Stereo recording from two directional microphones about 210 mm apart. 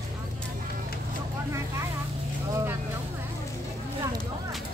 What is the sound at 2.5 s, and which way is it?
Vehicle, 15° right (ahead or behind).